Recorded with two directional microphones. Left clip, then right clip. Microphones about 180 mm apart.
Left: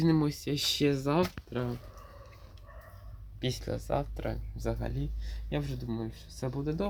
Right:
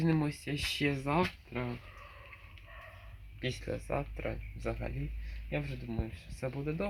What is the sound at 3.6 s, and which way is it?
Speech, 15° left (ahead or behind).